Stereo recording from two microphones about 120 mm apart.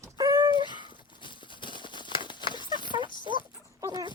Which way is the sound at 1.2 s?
40° left (ahead or behind).